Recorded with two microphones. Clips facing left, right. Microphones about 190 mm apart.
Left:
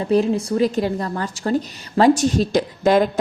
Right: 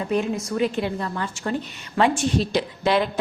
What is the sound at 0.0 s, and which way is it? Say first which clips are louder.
A woman's voice: left 6 dB; 35° left (ahead or behind).